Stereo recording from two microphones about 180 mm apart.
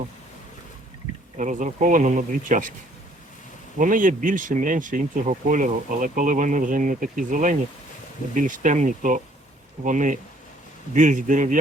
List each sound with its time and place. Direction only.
1.4 s speech: 45° right (ahead or behind)
3.8 s speech: 50° right (ahead or behind)